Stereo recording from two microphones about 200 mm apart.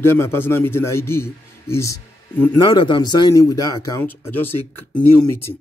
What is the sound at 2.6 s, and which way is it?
A man's voice, 25° left (ahead or behind).